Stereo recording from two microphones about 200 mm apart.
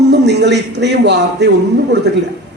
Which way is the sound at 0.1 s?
60° right (ahead or behind).